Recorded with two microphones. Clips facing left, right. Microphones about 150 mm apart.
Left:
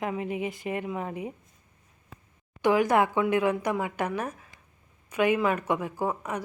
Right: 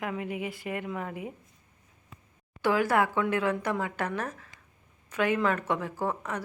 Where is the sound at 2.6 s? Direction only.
20° left (ahead or behind).